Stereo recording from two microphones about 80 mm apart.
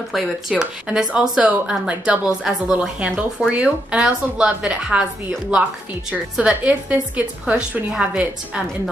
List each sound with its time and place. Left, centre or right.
0.1 s speech: centre
6.3 s speech: centre